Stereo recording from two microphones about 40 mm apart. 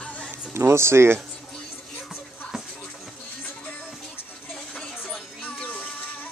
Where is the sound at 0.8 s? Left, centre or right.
Right.